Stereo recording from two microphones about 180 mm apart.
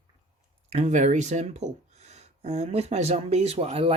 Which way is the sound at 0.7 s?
40° right (ahead or behind).